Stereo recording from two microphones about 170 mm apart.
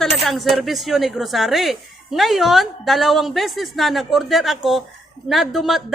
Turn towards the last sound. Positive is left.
turn(degrees=0)  # may be behind; listen again after turning